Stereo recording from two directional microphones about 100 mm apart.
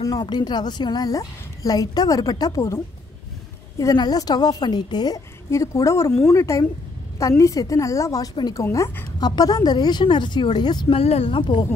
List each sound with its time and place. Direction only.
0.0 s a woman's voice: 40° left (ahead or behind)
3.7 s a woman's voice: 40° left (ahead or behind)
9.2 s speech: 40° left (ahead or behind)
10.9 s speech: 80° left; by 11.6 s 60° left (ahead or behind)